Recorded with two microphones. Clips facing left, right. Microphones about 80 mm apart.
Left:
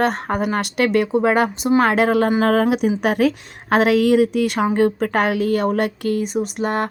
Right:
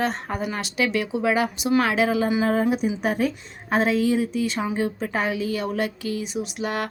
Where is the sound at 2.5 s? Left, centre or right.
Left.